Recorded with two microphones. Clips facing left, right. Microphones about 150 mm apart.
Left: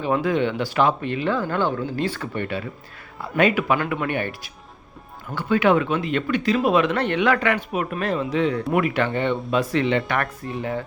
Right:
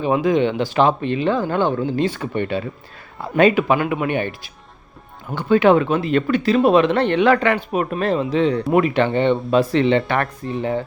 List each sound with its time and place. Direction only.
0.0 s speech: 15° right (ahead or behind)